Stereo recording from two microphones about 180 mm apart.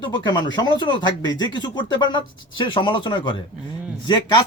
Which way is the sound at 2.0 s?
25° left (ahead or behind).